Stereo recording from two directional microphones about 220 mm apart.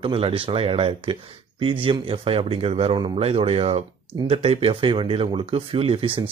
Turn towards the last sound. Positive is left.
turn(degrees=-25)  # may be behind; listen again after turning